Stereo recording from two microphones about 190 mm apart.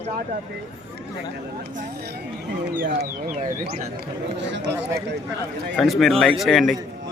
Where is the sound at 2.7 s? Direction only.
55° right (ahead or behind).